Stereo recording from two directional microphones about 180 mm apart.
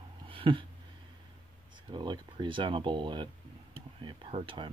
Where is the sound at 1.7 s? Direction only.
25° right (ahead or behind).